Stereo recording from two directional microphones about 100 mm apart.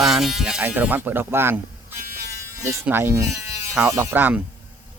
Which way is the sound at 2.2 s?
30° right (ahead or behind).